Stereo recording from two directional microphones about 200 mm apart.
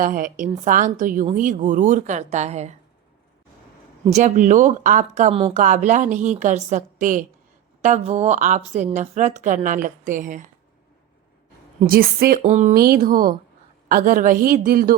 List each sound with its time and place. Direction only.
0.0 s a man's voice: 45° right (ahead or behind)
4.0 s speech: 35° right (ahead or behind)
11.8 s a man's voice: 45° right (ahead or behind)
12.4 s speech: 35° right (ahead or behind)
12.7 s a man's voice: 50° right (ahead or behind)